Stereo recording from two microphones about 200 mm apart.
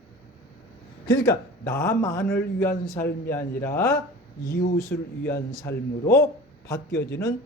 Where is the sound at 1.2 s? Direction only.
15° left (ahead or behind).